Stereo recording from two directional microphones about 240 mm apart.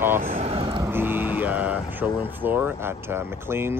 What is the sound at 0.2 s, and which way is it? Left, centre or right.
Vehicle, right.